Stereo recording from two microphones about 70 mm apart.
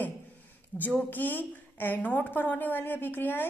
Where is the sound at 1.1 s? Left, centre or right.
Left.